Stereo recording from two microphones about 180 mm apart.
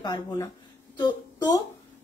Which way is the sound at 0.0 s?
25° left (ahead or behind).